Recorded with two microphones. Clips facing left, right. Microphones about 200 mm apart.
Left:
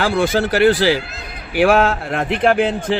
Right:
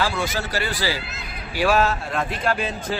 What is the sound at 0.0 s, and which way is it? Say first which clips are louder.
Speech: left 8 dB; 55° left (ahead or behind).